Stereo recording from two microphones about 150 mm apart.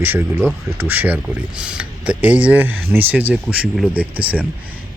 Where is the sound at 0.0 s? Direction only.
15° right (ahead or behind).